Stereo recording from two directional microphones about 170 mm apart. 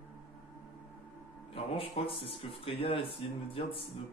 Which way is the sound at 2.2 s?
35° left (ahead or behind).